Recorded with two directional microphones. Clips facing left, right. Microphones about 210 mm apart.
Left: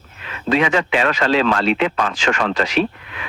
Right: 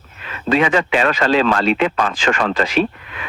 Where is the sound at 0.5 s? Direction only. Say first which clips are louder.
Right 1 dB; 40° right (ahead or behind).